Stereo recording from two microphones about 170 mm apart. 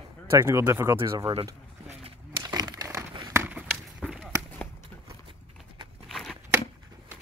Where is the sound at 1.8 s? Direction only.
35° right (ahead or behind).